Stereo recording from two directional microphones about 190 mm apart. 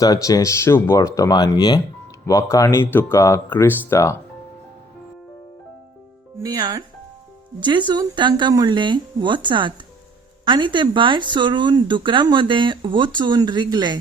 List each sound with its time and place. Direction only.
0.0 s speech: 20° left (ahead or behind)
6.4 s speech: 20° right (ahead or behind)